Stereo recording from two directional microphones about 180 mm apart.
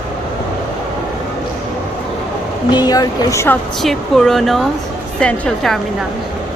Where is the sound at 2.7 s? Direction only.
20° left (ahead or behind).